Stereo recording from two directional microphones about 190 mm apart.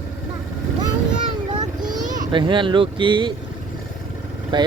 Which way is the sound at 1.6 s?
20° right (ahead or behind).